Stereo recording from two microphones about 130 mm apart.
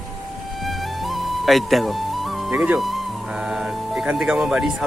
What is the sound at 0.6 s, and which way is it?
Music, centre (ahead or behind).